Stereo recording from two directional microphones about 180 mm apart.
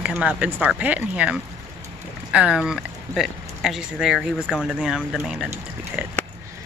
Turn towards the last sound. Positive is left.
turn(degrees=-10)  # may be behind; listen again after turning